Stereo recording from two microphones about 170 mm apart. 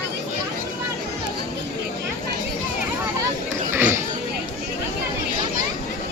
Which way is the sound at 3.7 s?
15° right (ahead or behind).